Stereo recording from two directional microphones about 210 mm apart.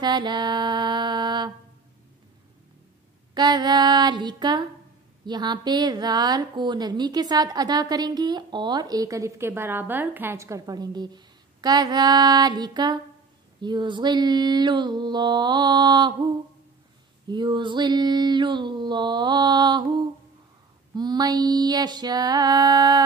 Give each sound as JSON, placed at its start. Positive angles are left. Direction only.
{"t": 0.0, "sound": "a woman's voice", "side_deg": -20}
{"t": 3.3, "sound": "a woman's voice", "side_deg": -20}